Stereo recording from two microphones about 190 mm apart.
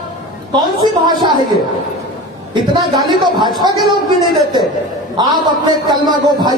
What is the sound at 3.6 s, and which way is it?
Speech, 20° right (ahead or behind).